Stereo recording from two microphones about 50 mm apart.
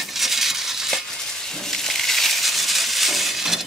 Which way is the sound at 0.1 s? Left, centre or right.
Centre.